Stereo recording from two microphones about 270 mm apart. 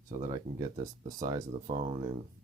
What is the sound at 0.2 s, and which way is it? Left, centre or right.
Speech, centre.